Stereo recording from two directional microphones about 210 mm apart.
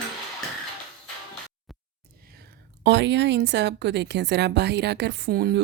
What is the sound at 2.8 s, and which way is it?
A woman's voice, 55° right (ahead or behind).